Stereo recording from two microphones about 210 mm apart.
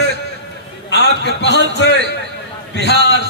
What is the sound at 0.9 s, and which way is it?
A man's voice, 55° left (ahead or behind).